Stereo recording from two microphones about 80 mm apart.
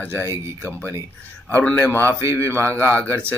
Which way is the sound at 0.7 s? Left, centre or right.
Left.